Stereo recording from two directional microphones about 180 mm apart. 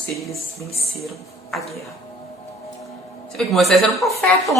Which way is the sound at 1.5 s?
Centre (ahead or behind).